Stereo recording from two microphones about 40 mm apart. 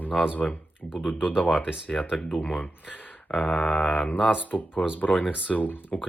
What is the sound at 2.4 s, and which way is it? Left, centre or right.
Speech, left.